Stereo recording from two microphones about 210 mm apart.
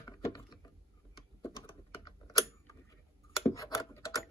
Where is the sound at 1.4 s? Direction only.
15° left (ahead or behind).